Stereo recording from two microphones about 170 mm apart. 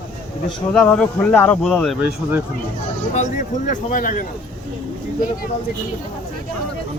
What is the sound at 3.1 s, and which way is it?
Speech, 50° left (ahead or behind).